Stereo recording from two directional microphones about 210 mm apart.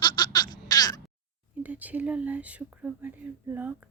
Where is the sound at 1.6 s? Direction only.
10° right (ahead or behind).